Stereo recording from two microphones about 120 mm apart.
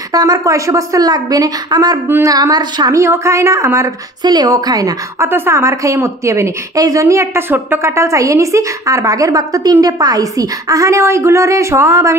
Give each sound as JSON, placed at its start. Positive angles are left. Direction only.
{"t": 0.1, "sound": "speech", "side_deg": -30}
{"t": 3.0, "sound": "a woman's voice", "side_deg": -25}
{"t": 4.2, "sound": "speech", "side_deg": -35}
{"t": 5.3, "sound": "a woman's voice", "side_deg": -20}